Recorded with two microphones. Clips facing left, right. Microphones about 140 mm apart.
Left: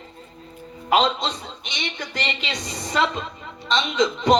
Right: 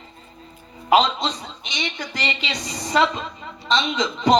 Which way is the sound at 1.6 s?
55° left (ahead or behind).